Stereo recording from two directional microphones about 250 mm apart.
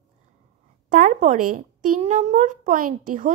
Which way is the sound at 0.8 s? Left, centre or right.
Right.